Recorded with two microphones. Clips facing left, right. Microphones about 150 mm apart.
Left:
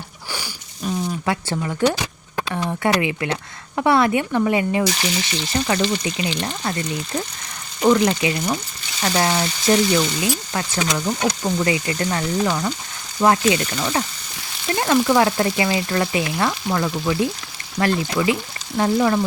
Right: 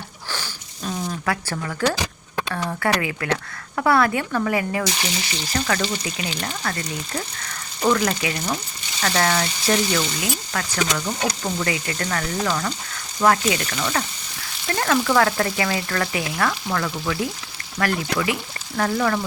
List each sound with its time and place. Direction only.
0.3 s a sound: 10° left (ahead or behind)
1.3 s speech: 20° left (ahead or behind)
7.9 s speech: 25° left (ahead or behind)